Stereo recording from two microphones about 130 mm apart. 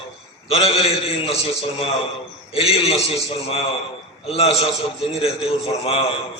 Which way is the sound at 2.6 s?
50° left (ahead or behind).